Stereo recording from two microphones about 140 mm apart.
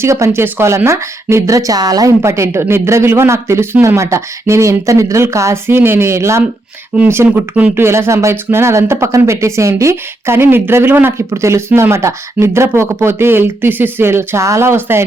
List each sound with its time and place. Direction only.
0.0 s a woman's voice: 20° right (ahead or behind)